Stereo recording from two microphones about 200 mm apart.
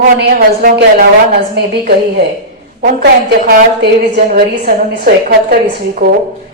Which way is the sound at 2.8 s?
50° right (ahead or behind).